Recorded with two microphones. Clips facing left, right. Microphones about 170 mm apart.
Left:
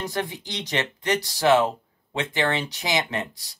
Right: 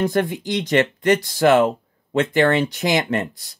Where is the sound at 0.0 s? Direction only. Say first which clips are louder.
Right 9 dB; 50° right (ahead or behind).